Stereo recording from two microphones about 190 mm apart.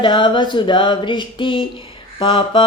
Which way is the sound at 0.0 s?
25° left (ahead or behind).